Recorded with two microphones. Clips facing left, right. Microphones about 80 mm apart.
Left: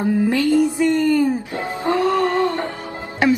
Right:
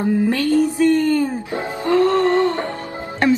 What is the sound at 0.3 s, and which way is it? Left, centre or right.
Music, centre.